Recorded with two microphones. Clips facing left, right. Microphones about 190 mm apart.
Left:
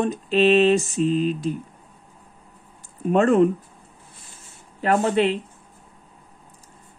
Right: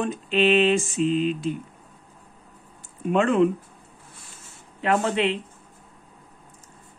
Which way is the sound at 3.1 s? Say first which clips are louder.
Left 3 dB; 40° left (ahead or behind).